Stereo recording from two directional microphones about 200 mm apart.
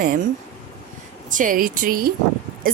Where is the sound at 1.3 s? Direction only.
40° right (ahead or behind).